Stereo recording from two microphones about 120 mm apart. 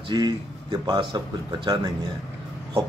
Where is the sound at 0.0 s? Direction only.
40° right (ahead or behind).